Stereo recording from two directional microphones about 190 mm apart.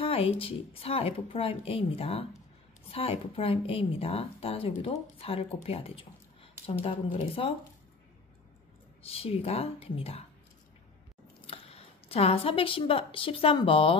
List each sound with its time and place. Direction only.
0.0 s a woman's voice: 30° left (ahead or behind)
9.0 s a woman's voice: 30° left (ahead or behind)
11.4 s speech: 30° left (ahead or behind)